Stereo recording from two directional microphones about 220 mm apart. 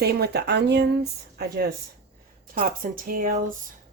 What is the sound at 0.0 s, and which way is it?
Speech, 45° right (ahead or behind).